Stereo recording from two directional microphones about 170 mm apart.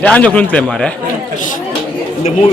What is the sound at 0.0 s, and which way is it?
Speech, 5° left (ahead or behind).